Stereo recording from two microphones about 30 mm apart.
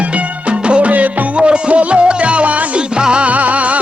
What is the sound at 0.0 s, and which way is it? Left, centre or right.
Music, right.